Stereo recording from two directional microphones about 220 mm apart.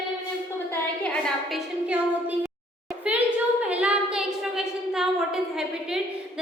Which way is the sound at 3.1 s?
5° right (ahead or behind).